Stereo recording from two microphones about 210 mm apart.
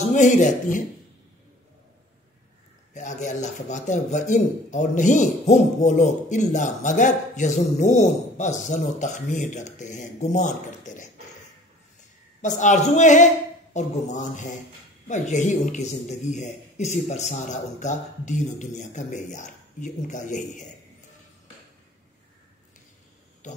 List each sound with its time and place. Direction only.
0.1 s a man's voice: 35° left (ahead or behind)
2.9 s a man's voice: 35° left (ahead or behind)
12.4 s a man's voice: 35° left (ahead or behind)